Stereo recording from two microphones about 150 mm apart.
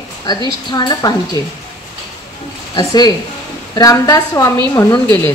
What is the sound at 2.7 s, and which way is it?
A woman's voice, 25° left (ahead or behind).